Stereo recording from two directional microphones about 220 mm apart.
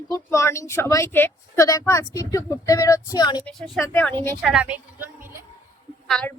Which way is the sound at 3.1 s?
20° left (ahead or behind).